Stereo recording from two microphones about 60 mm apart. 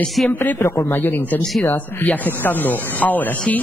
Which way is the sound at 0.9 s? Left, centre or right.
Left.